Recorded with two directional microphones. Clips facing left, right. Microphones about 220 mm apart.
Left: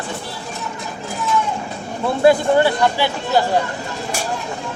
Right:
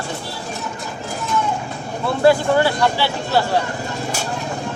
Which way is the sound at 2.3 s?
20° left (ahead or behind).